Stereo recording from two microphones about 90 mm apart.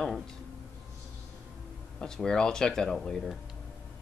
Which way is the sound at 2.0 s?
5° left (ahead or behind).